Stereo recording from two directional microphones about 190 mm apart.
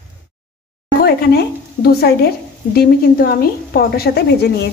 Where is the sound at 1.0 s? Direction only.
55° left (ahead or behind).